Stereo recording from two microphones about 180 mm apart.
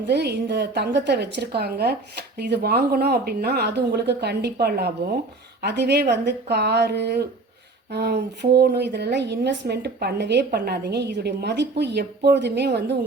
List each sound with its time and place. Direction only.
0.1 s a woman's voice: 65° right (ahead or behind)
5.6 s a woman's voice: 70° right (ahead or behind)